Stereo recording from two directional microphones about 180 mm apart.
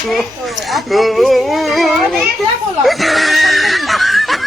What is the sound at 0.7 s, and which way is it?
A child's voice, centre (ahead or behind).